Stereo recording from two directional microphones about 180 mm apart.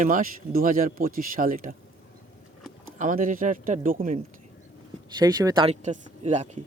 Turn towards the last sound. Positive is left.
turn(degrees=-40)  # may be behind; listen again after turning